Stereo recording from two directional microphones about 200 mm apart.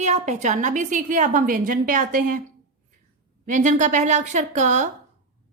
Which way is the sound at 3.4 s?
40° right (ahead or behind).